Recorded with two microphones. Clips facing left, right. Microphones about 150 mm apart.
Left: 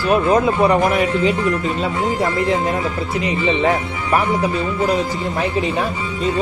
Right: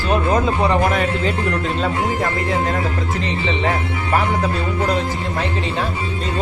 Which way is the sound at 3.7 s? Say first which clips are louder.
Left 2 dB; 15° left (ahead or behind).